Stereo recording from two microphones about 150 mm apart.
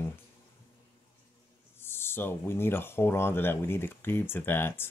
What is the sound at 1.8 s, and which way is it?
Speech, 15° left (ahead or behind).